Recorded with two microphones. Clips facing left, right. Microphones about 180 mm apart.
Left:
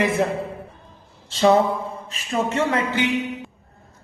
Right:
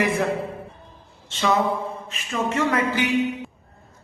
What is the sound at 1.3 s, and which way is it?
A man's voice, 35° left (ahead or behind).